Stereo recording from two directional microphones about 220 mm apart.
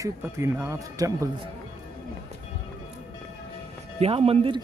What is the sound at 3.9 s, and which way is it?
Speech, 25° right (ahead or behind).